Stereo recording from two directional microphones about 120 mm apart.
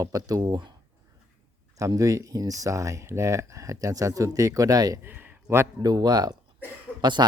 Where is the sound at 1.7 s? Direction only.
25° right (ahead or behind).